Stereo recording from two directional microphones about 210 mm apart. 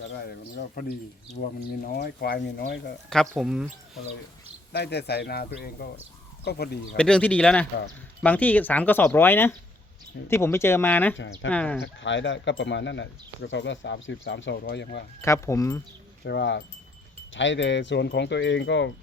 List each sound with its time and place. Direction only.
0.8 s speech: 40° left (ahead or behind)
3.1 s speech: centre (ahead or behind)
4.7 s speech: 50° left (ahead or behind)
6.9 s speech: 5° left (ahead or behind)
11.8 s speech: 60° left (ahead or behind)
15.2 s speech: 15° left (ahead or behind)
16.2 s speech: 55° left (ahead or behind)